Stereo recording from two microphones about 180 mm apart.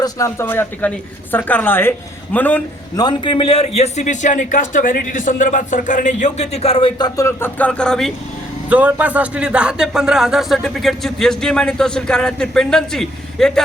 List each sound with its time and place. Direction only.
0.0 s speech: 15° left (ahead or behind)
2.9 s a man's voice: 25° left (ahead or behind); by 8.1 s 5° left (ahead or behind)
8.7 s speech: 10° right (ahead or behind)